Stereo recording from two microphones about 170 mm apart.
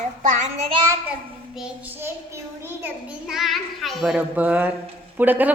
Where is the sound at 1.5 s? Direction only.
5° right (ahead or behind).